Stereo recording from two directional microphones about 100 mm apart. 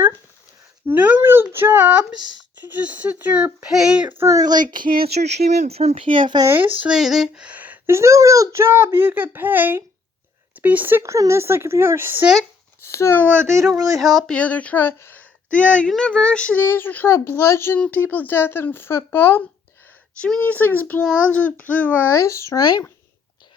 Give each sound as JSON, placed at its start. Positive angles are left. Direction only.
{"t": 0.9, "sound": "a sound", "side_deg": -15}
{"t": 2.6, "sound": "speech", "side_deg": -15}
{"t": 4.2, "sound": "speech", "side_deg": -35}
{"t": 5.6, "sound": "speech", "side_deg": -90}
{"t": 6.4, "sound": "a child's voice", "side_deg": -20}
{"t": 6.9, "sound": "speech", "side_deg": -5}
{"t": 7.9, "sound": "a child's voice", "side_deg": -30}
{"t": 12.8, "sound": "a sound", "side_deg": 25}
{"t": 13.1, "sound": "a child's voice", "side_deg": 15}
{"t": 13.4, "sound": "a child's voice", "side_deg": -30}
{"t": 13.9, "sound": "a sound", "side_deg": 0}
{"t": 14.3, "sound": "a woman's voice", "side_deg": 15}
{"t": 17.7, "sound": "speech", "side_deg": 15}
{"t": 20.2, "sound": "a child's voice", "side_deg": 15}